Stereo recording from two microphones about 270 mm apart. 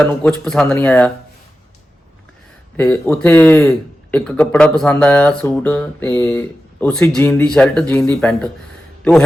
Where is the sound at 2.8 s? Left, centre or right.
Centre.